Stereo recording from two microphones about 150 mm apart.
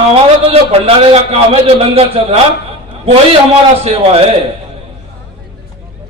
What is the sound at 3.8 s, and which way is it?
Speech, 40° right (ahead or behind).